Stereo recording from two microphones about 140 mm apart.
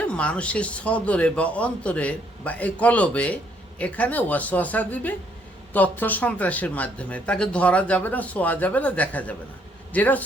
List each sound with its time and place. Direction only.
0.0 s speech: 10° left (ahead or behind)